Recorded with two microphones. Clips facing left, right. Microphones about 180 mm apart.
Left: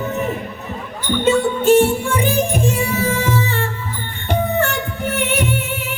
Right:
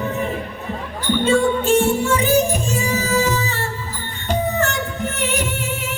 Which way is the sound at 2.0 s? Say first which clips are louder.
Right 2 dB; 55° left (ahead or behind).